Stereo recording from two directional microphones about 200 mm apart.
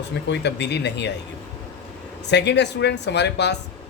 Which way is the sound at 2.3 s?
60° left (ahead or behind).